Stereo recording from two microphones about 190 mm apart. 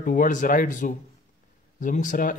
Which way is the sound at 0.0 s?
45° left (ahead or behind).